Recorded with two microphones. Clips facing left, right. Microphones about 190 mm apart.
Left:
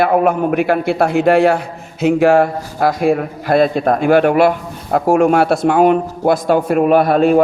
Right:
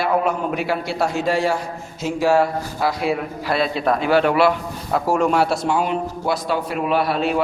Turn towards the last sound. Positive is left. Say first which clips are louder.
# left 9 dB
turn(degrees=50)  # may be behind; listen again after turning